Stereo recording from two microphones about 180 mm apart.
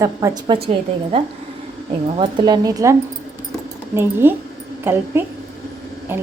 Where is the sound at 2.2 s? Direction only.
25° right (ahead or behind).